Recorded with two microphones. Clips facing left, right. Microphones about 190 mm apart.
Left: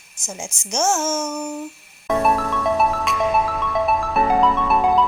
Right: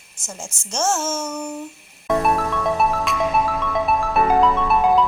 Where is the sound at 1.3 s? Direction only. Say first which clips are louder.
Left 1 dB; 5° left (ahead or behind).